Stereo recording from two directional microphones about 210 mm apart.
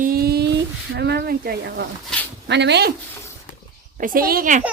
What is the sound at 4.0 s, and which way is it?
Speech, 45° right (ahead or behind).